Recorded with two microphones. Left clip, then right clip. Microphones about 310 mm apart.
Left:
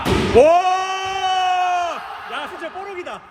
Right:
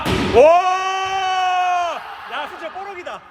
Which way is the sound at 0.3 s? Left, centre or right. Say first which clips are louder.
Right 1 dB; right.